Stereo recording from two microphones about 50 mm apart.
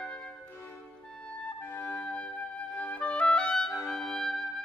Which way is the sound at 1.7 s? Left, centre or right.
Left.